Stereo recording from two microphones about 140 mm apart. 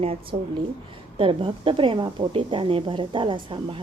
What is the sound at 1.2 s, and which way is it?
A woman's voice, 40° right (ahead or behind).